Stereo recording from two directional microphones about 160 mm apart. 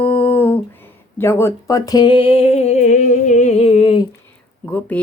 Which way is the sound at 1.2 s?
15° left (ahead or behind).